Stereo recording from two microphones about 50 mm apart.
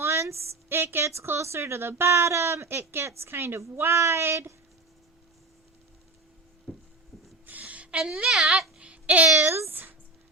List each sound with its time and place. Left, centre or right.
0.0 s speech: right
1.0 s a woman's voice: right
3.8 s a woman's voice: right
6.7 s a sound: centre
7.4 s a sound: right
7.9 s speech: centre
8.8 s babbling: right
9.6 s speech: right